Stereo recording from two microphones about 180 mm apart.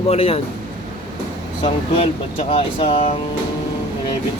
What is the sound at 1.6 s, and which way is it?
Speech, 35° left (ahead or behind).